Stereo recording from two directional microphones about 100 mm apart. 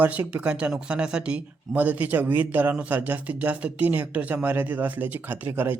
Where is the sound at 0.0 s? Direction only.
15° right (ahead or behind).